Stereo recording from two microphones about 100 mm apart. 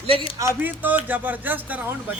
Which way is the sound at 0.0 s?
70° right (ahead or behind).